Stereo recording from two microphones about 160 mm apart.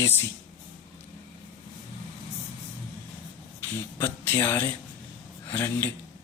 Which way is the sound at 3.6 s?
15° left (ahead or behind).